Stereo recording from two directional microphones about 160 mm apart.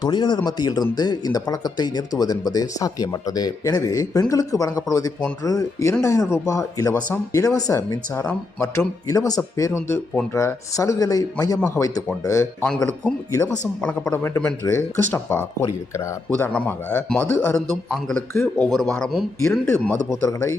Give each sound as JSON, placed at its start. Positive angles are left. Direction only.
{"t": 0.0, "sound": "speech", "side_deg": 30}
{"t": 9.0, "sound": "speech", "side_deg": 25}
{"t": 12.6, "sound": "speech", "side_deg": 5}